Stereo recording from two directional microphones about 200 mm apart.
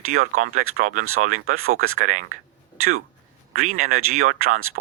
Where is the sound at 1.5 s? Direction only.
90° right.